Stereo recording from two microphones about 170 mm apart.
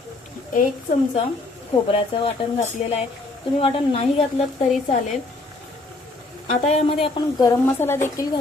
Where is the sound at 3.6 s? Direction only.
35° left (ahead or behind).